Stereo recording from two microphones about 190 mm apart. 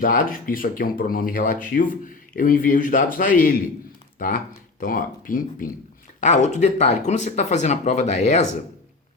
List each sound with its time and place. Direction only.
0.0 s speech: 45° left (ahead or behind)
4.8 s speech: 45° left (ahead or behind)